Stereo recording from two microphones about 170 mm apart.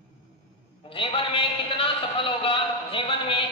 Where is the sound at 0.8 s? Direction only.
30° left (ahead or behind).